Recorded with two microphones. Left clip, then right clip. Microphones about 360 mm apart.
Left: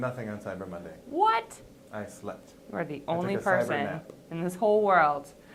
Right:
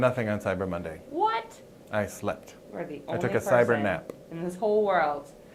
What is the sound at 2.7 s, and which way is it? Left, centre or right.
Speech, left.